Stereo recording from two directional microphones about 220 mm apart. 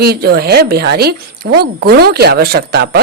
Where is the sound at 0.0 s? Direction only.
45° right (ahead or behind).